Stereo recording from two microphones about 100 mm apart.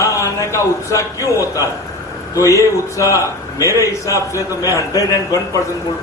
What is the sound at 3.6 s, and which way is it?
Speech, 30° right (ahead or behind).